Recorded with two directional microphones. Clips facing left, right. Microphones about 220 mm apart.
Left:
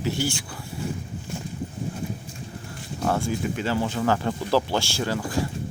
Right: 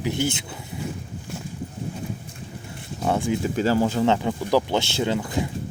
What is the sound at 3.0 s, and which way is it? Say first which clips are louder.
Speech: right 2 dB; 20° right (ahead or behind).